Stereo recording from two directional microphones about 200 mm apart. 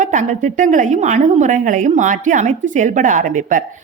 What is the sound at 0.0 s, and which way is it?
A woman's voice, 40° right (ahead or behind).